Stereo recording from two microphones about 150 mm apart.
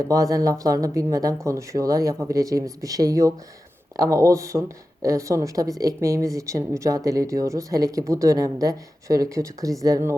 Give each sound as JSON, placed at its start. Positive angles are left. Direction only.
{"t": 0.1, "sound": "a woman's voice", "side_deg": -20}